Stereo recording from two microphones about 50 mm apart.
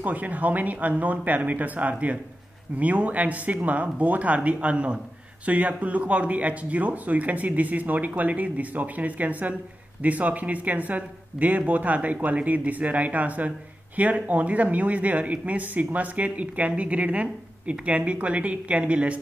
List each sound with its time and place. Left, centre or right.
0.0 s speech: right